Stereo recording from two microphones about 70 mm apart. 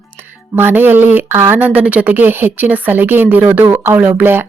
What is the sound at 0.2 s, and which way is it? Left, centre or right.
Speech, right.